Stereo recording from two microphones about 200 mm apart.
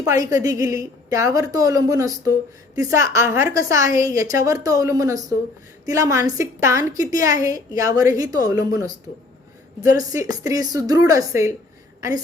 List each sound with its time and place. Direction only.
0.0 s a woman's voice: 15° right (ahead or behind)
9.9 s a woman's voice: 15° right (ahead or behind)